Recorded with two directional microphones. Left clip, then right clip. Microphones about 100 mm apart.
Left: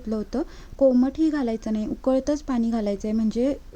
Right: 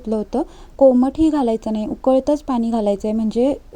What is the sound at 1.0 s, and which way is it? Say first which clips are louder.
A woman's voice: right 6 dB; 20° right (ahead or behind).